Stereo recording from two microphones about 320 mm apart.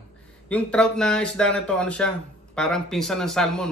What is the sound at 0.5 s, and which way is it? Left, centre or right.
Speech, centre.